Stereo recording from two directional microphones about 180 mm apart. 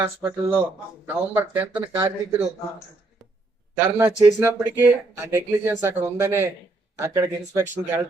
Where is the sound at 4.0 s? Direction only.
10° right (ahead or behind).